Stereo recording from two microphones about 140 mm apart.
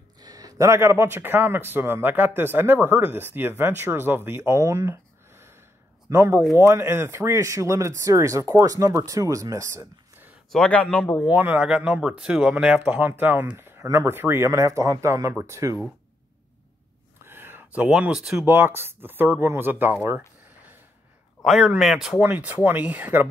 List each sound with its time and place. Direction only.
0.2 s a man's voice: 25° right (ahead or behind)
10.5 s speech: 10° left (ahead or behind)
11.2 s a man's voice: 10° right (ahead or behind)
17.2 s a sound: 15° right (ahead or behind)
17.8 s speech: 5° right (ahead or behind)
18.4 s a man's voice: 15° right (ahead or behind)
21.5 s a man's voice: centre (ahead or behind)